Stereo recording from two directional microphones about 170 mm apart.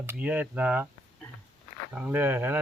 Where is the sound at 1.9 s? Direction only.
5° right (ahead or behind).